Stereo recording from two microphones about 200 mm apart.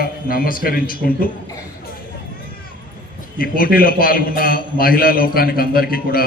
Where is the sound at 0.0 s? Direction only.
45° left (ahead or behind).